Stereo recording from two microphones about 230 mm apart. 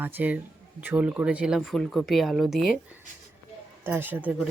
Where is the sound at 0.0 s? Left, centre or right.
Centre.